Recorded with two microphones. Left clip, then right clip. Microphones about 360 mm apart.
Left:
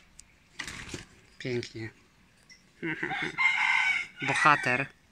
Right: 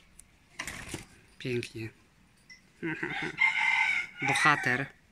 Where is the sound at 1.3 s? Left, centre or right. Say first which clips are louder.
Even; centre.